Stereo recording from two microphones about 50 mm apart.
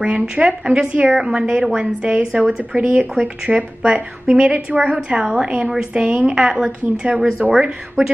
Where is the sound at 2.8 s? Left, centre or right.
Right.